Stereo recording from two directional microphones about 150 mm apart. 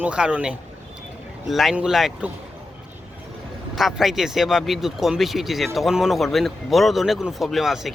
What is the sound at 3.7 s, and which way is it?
A man's voice, centre (ahead or behind).